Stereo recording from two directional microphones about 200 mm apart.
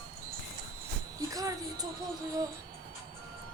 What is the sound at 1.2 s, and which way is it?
Speech, 15° right (ahead or behind).